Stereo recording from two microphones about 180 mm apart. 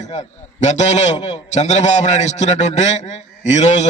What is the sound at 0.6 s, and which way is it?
A man's voice, 40° left (ahead or behind).